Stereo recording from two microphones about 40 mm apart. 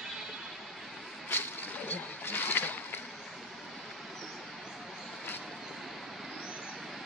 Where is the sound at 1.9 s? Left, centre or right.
Left.